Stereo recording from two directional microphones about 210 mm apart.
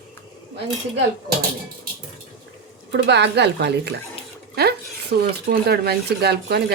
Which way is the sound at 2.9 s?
55° right (ahead or behind).